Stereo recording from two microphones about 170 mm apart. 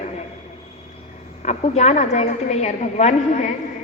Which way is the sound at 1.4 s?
40° left (ahead or behind).